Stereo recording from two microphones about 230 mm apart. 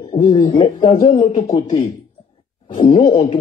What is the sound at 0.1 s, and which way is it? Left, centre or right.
Speech, left.